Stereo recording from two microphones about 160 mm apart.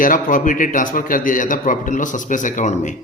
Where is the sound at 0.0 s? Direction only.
55° left (ahead or behind).